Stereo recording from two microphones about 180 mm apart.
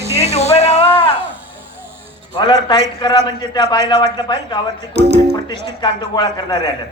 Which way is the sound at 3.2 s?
25° left (ahead or behind).